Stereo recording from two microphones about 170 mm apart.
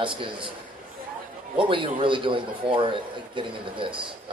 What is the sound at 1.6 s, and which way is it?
A man's voice, 30° right (ahead or behind).